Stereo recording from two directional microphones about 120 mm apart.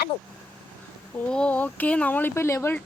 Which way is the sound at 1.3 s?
10° left (ahead or behind).